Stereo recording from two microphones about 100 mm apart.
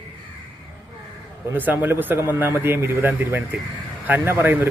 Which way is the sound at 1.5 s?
20° right (ahead or behind).